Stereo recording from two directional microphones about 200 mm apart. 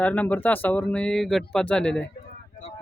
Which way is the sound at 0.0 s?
10° left (ahead or behind).